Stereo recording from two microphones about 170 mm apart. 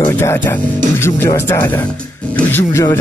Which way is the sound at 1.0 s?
15° left (ahead or behind).